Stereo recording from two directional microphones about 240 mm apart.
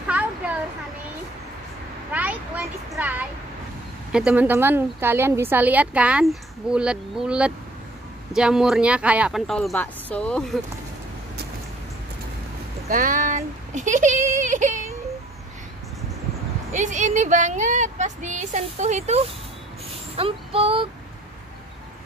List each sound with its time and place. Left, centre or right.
2.1 s a sound: centre
4.1 s a woman's voice: centre
12.9 s speech: right
16.7 s speech: right
20.2 s female singing: right